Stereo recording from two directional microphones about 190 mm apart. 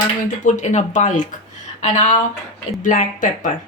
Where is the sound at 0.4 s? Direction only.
40° left (ahead or behind).